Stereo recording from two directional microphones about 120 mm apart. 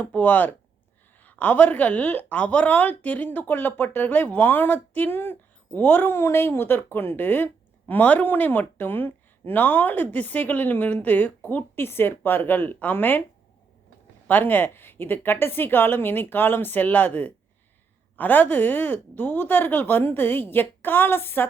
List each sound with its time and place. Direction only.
0.0 s a woman's voice: 15° left (ahead or behind)
14.3 s a woman's voice: 15° left (ahead or behind)